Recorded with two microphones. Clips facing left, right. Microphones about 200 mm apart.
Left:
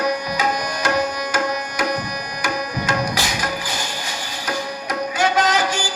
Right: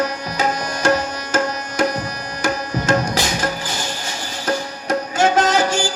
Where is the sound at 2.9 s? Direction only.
45° right (ahead or behind).